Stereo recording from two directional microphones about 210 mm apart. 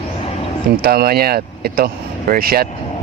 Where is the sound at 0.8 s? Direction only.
45° right (ahead or behind).